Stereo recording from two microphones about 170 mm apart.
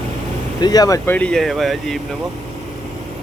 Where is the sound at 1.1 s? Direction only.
5° left (ahead or behind).